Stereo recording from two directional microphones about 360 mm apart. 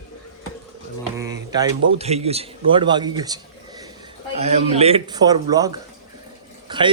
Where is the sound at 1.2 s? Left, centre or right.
Centre.